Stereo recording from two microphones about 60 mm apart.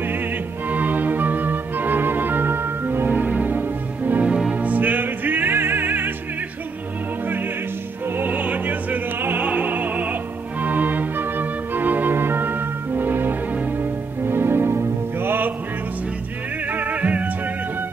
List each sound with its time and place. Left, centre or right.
0.7 s music: right
3.1 s music: right
4.3 s music: centre; by 6.1 s right
8.3 s opera: right
9.5 s music: right
16.7 s music: right